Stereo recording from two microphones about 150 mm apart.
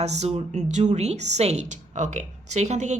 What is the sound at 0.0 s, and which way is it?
A woman's voice, 50° right (ahead or behind).